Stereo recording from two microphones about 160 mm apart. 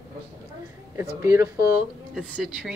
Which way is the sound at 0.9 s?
20° right (ahead or behind).